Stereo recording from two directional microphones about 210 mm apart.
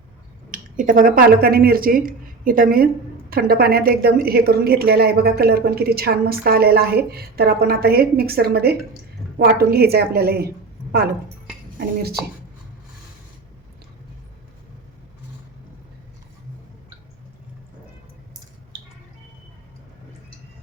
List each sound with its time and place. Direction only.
0.5 s speech: 40° right (ahead or behind)